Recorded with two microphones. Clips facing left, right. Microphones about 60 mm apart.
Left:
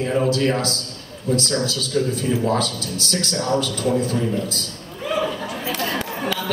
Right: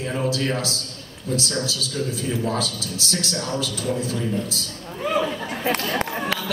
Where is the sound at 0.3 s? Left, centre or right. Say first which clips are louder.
Left 4 dB; left.